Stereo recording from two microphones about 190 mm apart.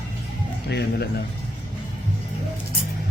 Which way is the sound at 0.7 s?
60° left (ahead or behind).